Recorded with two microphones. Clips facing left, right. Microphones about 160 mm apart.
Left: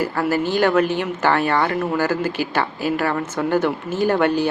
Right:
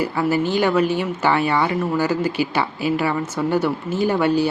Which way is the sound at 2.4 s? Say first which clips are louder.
Right 2 dB; 45° left (ahead or behind).